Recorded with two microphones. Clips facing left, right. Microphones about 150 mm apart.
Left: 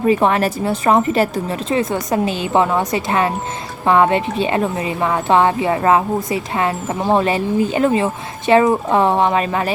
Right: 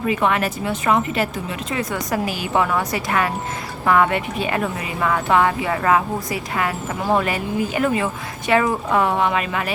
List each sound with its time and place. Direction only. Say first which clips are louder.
0.0 s speech: left 5 dB; 35° left (ahead or behind)